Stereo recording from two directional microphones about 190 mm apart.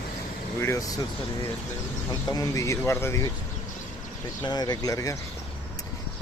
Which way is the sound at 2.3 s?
15° left (ahead or behind).